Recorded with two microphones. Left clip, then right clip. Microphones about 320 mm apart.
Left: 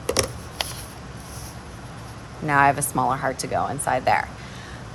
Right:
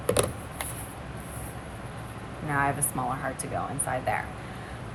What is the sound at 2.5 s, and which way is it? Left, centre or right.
A woman's voice, left.